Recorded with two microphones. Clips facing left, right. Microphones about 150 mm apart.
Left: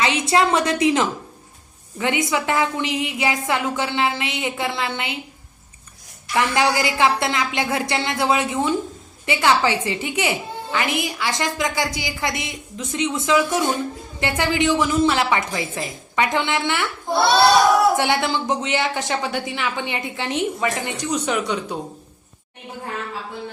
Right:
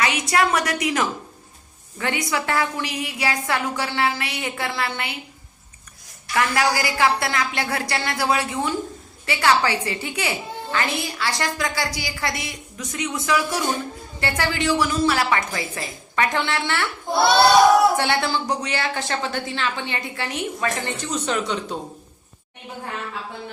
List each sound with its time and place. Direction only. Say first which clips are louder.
0.0 s a woman's voice: left 2 dB; 25° left (ahead or behind)
6.3 s a woman's voice: left 2 dB; 20° left (ahead or behind)
17.9 s a woman's voice: left 2 dB; 15° left (ahead or behind)